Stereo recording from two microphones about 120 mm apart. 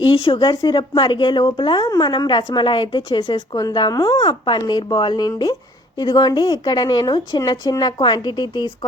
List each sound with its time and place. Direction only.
0.0 s a woman's voice: 45° left (ahead or behind)
3.3 s speech: 30° left (ahead or behind)